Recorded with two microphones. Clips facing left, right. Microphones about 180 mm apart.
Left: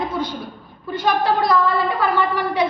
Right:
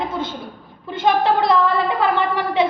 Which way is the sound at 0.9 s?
25° right (ahead or behind).